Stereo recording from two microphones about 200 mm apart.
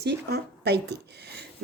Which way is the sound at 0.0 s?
55° right (ahead or behind).